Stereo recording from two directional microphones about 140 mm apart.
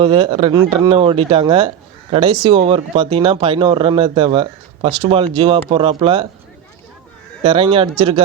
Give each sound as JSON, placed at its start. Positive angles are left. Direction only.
{"t": 0.0, "sound": "speech", "side_deg": -40}
{"t": 7.4, "sound": "speech", "side_deg": -40}